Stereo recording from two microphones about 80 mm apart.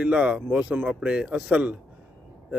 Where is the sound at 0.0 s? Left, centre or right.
Centre.